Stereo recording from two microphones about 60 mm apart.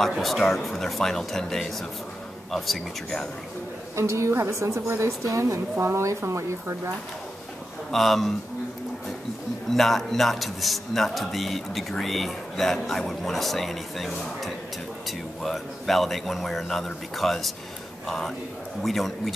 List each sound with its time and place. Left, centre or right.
0.2 s speech: centre
3.9 s a woman's voice: right
7.9 s speech: centre
9.7 s speech: centre